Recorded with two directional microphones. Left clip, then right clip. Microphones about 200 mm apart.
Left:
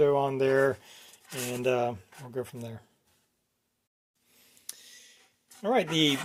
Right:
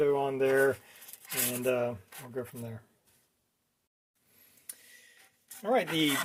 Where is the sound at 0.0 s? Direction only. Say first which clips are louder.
Left 3 dB; 45° left (ahead or behind).